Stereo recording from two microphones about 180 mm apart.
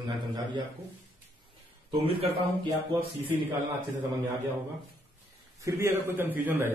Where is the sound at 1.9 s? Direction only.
30° right (ahead or behind).